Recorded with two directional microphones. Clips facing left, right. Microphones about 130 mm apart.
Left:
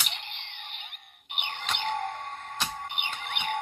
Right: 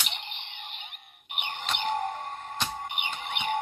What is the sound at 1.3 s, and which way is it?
Music, 10° right (ahead or behind).